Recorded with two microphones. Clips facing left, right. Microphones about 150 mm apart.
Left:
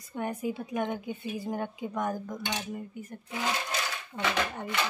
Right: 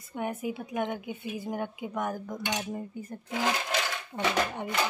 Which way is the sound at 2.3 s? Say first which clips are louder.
Right 2 dB; 30° right (ahead or behind).